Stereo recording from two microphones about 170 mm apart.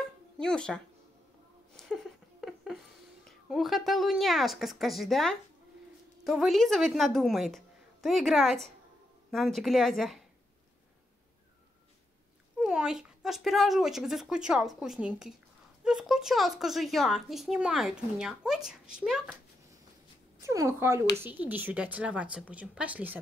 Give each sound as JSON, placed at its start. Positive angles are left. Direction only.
{"t": 0.4, "sound": "speech", "side_deg": 5}
{"t": 1.8, "sound": "a sound", "side_deg": 0}
{"t": 6.2, "sound": "speech", "side_deg": 0}
{"t": 12.5, "sound": "speech", "side_deg": -5}
{"t": 20.4, "sound": "a woman's voice", "side_deg": -20}